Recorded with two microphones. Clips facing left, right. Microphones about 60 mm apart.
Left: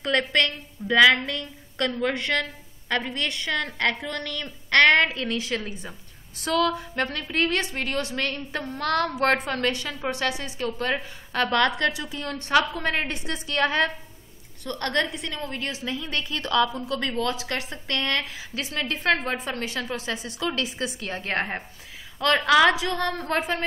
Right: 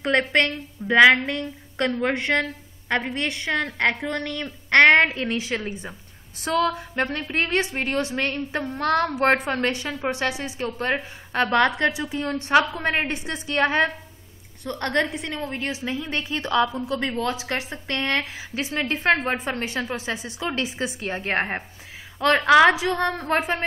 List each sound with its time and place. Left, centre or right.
0.0 s a woman's voice: right
20.0 s a woman's voice: centre